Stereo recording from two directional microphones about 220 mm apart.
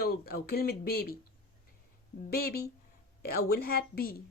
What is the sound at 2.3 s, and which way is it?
Speech, 45° left (ahead or behind).